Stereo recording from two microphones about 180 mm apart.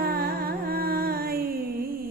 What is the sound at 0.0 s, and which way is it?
Music, 55° right (ahead or behind).